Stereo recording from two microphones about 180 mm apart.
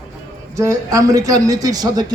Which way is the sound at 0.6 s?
20° right (ahead or behind).